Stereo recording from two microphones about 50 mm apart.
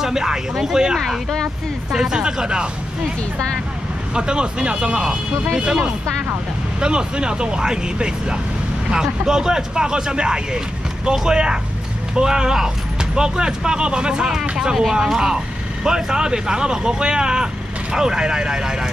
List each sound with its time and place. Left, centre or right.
0.0 s speech: centre
0.9 s speech: centre
1.9 s speech: centre
4.1 s speech: centre
6.8 s speech: centre